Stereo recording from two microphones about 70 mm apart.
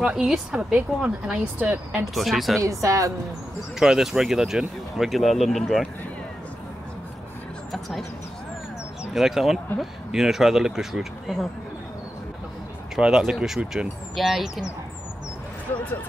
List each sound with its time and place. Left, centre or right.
0.0 s speech: centre
1.3 s speech: right
2.1 s speech: centre
2.6 s speech: right
3.8 s speech: centre
9.1 s speech: centre
12.9 s speech: centre